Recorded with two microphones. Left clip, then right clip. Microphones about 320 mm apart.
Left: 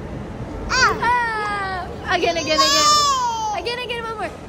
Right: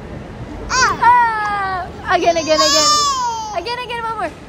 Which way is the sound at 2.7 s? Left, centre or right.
Centre.